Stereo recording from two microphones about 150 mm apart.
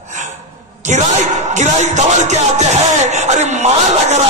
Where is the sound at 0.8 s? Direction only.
50° right (ahead or behind).